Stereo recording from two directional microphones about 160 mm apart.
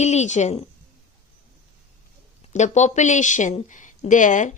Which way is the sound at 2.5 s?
45° left (ahead or behind).